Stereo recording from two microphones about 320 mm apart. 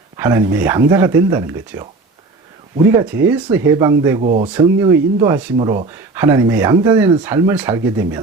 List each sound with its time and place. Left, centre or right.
0.2 s speech: centre
3.0 s speech: centre
4.2 s speech: right
4.4 s speech: centre
5.5 s speech: centre